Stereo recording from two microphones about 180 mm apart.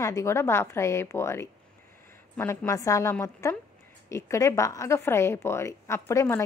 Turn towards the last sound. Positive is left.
turn(degrees=15)  # may be behind; listen again after turning